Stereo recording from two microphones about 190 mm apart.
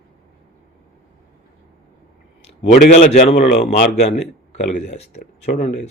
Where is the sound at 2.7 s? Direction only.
40° left (ahead or behind).